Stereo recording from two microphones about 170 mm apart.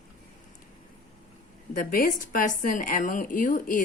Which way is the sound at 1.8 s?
60° left (ahead or behind).